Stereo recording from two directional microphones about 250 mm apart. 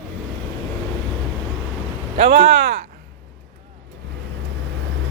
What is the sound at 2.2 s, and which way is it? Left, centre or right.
Speech, right.